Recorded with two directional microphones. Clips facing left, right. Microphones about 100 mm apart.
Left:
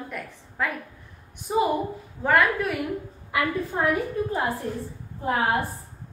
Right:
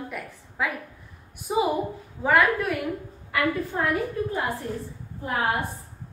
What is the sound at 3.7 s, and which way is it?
Speech, 15° left (ahead or behind).